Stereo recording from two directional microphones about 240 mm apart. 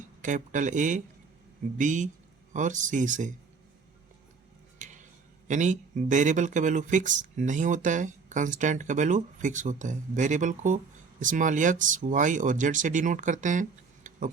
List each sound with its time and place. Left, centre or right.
0.2 s speech: right
4.8 s a sound: right
5.5 s speech: right